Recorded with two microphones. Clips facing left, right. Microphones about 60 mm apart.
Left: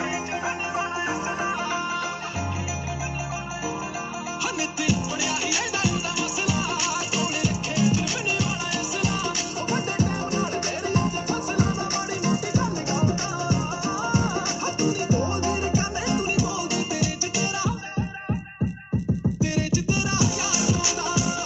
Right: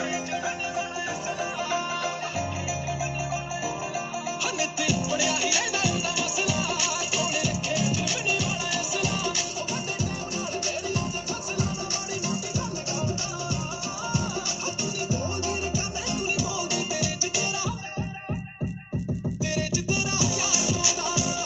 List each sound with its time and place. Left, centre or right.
4.6 s music: left
12.3 s music: left
14.8 s music: left
19.4 s music: left